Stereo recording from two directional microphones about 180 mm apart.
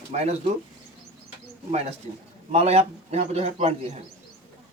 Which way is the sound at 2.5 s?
35° right (ahead or behind).